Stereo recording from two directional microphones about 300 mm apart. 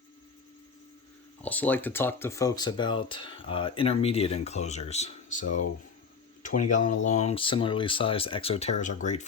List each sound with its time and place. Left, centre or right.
1.4 s speech: centre; by 9.2 s left